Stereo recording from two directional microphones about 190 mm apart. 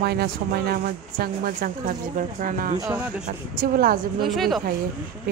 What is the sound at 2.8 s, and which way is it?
Speech, 5° right (ahead or behind).